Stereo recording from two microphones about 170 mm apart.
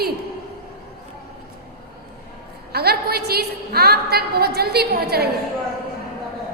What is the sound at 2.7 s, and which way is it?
A woman's voice, 70° right (ahead or behind).